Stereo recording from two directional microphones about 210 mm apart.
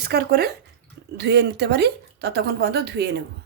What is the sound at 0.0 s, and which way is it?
Speech, 50° right (ahead or behind).